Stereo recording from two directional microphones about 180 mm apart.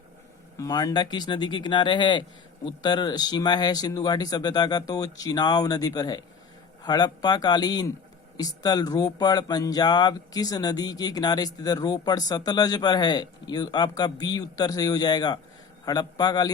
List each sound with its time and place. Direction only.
0.5 s speech: 20° left (ahead or behind)